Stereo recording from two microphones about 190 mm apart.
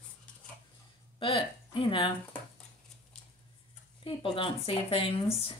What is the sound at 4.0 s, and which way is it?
Speech, 25° left (ahead or behind).